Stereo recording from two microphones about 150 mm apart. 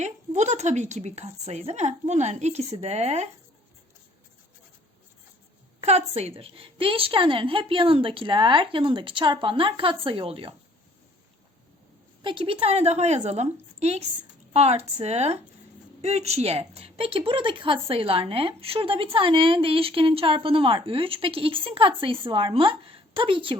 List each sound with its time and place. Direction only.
0.0 s a woman's voice: 50° right (ahead or behind)
5.8 s a woman's voice: 45° right (ahead or behind)
12.2 s a woman's voice: 35° right (ahead or behind)